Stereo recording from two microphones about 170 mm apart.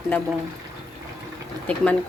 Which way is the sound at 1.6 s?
10° left (ahead or behind).